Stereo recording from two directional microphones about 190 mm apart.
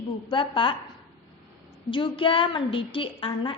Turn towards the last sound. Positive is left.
turn(degrees=25)  # may be behind; listen again after turning